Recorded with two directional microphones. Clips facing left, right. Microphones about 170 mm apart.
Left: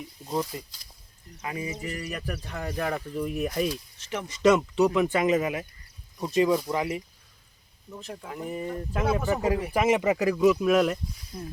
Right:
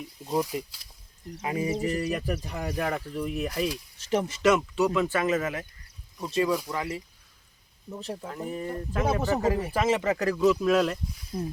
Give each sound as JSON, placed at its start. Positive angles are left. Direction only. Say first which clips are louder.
{"t": 0.3, "sound": "speech", "louder": "right 2 dB", "side_deg": -10}
{"t": 1.4, "sound": "speech", "louder": "right 6 dB", "side_deg": -25}
{"t": 2.1, "sound": "speech", "louder": "right 3 dB", "side_deg": -15}
{"t": 4.4, "sound": "speech", "louder": "left 4 dB", "side_deg": 20}
{"t": 7.9, "sound": "speech", "louder": "right 4 dB", "side_deg": -30}
{"t": 8.3, "sound": "speech", "louder": "left 2 dB", "side_deg": 10}